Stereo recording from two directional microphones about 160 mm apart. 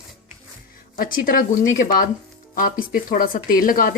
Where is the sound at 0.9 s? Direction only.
60° left (ahead or behind).